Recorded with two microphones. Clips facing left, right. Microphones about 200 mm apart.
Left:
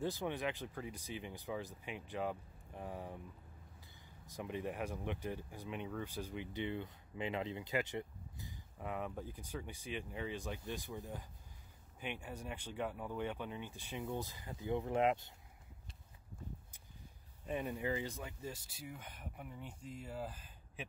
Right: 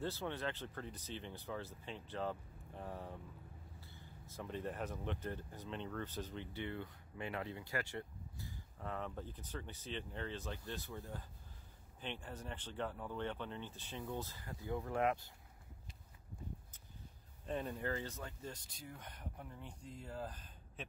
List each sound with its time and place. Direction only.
0.0 s speech: 15° left (ahead or behind)
17.5 s speech: 10° left (ahead or behind)